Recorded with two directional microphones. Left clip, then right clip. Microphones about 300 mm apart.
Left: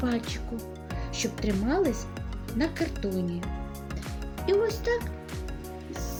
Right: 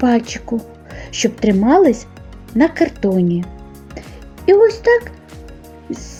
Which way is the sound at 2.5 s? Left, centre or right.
Left.